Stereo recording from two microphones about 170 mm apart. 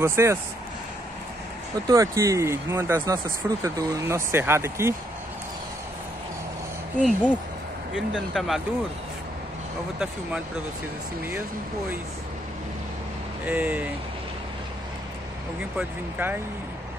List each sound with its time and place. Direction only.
0.0 s speech: 15° right (ahead or behind)
1.9 s speech: 20° right (ahead or behind)
7.0 s speech: 5° left (ahead or behind)
13.5 s speech: 15° right (ahead or behind)
15.8 s speech: 10° right (ahead or behind)